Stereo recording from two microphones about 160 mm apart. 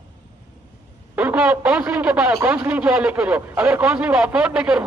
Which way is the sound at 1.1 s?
10° right (ahead or behind).